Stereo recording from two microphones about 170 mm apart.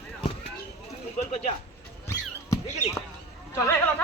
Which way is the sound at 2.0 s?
15° left (ahead or behind).